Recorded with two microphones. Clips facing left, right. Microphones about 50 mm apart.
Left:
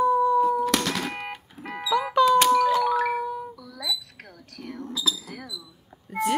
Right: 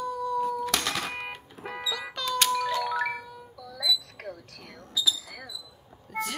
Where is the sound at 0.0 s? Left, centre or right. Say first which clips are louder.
Left 9 dB; left.